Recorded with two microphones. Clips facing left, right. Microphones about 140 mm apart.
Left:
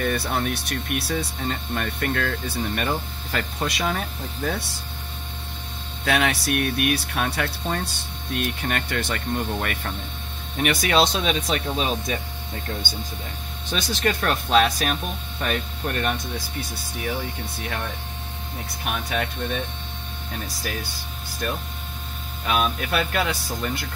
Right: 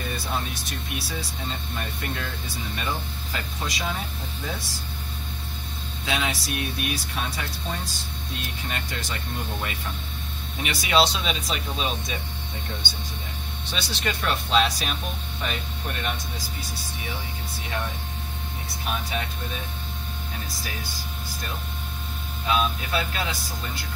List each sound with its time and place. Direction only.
0.0 s speech: 65° left (ahead or behind)
6.0 s speech: 60° left (ahead or behind)
13.7 s speech: 45° left (ahead or behind)
22.5 s speech: 65° left (ahead or behind)